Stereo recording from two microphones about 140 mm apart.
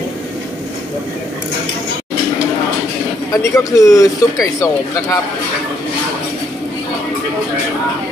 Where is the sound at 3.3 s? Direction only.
25° left (ahead or behind).